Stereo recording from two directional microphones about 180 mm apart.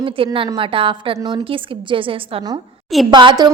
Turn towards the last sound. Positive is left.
turn(degrees=-25)  # may be behind; listen again after turning